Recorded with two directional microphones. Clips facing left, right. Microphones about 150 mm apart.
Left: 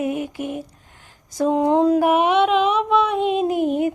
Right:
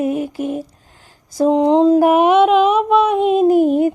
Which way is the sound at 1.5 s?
20° right (ahead or behind).